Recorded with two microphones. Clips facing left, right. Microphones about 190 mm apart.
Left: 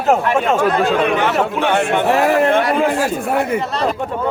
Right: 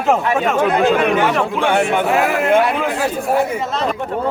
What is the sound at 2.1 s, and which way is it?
Speech, 35° left (ahead or behind).